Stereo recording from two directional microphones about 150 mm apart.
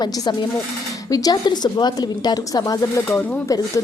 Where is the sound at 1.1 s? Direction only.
25° left (ahead or behind).